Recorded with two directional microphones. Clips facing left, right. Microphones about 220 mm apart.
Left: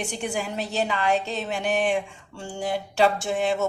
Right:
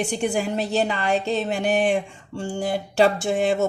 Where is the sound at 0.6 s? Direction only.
35° right (ahead or behind).